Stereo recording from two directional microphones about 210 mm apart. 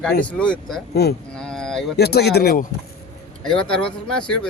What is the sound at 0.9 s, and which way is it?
Speech, 50° left (ahead or behind).